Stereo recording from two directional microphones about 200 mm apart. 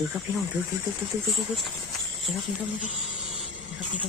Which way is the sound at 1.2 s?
Centre (ahead or behind).